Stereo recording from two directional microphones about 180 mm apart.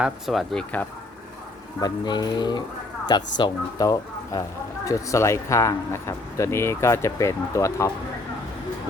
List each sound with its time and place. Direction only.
0.0 s speech: centre (ahead or behind)
1.8 s speech: 25° left (ahead or behind)